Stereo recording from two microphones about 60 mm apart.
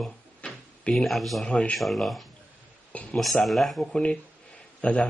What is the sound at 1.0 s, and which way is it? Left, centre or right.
Speech, centre.